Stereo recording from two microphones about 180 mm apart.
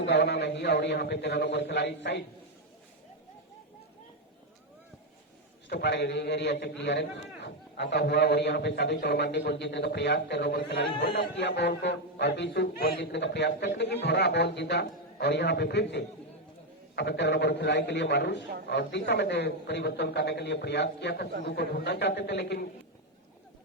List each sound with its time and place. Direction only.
0.0 s a man's voice: 80° left
5.6 s a man's voice: 75° left (ahead or behind)